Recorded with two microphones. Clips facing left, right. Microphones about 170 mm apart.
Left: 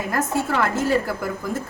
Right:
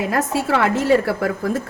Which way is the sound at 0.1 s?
75° right (ahead or behind).